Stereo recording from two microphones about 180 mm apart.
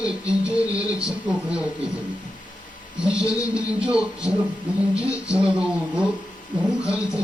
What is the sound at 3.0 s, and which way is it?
Speech, 5° right (ahead or behind).